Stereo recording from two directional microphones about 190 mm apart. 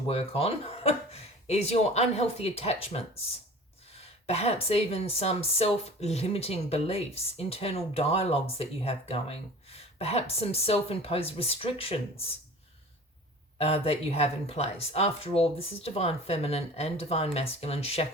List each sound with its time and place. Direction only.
0.1 s speech: 30° left (ahead or behind)
13.6 s speech: 30° left (ahead or behind)